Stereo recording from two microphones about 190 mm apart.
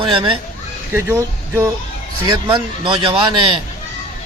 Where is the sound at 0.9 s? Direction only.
15° right (ahead or behind).